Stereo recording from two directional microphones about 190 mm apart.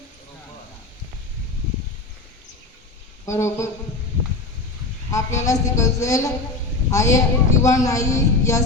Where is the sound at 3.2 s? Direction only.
15° left (ahead or behind).